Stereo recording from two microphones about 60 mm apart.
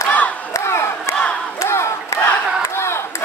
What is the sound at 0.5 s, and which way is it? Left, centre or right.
Battle cry, left.